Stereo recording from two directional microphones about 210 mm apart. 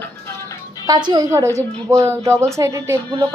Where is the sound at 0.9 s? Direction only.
20° right (ahead or behind).